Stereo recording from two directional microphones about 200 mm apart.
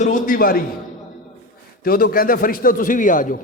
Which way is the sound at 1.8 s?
45° left (ahead or behind).